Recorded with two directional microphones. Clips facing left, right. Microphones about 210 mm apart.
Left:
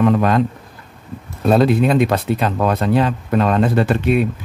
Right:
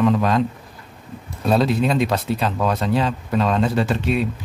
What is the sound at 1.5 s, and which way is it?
Speech, 55° left (ahead or behind).